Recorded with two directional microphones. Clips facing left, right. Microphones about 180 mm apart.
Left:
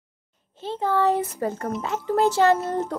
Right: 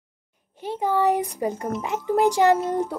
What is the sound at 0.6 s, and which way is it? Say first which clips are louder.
Speech: even; 15° right (ahead or behind).